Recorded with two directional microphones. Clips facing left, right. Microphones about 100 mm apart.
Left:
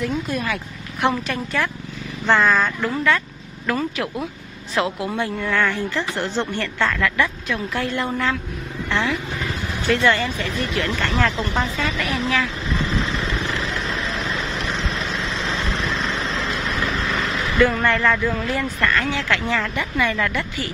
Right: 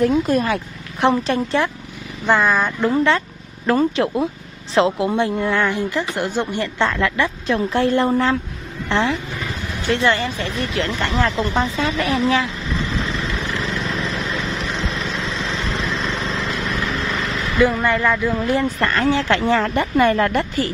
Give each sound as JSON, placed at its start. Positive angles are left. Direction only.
{"t": 0.0, "sound": "a woman's voice", "side_deg": -40}
{"t": 2.2, "sound": "speech", "side_deg": -10}
{"t": 2.9, "sound": "a woman's voice", "side_deg": -25}
{"t": 17.6, "sound": "speech", "side_deg": -10}
{"t": 18.4, "sound": "a woman's voice", "side_deg": -30}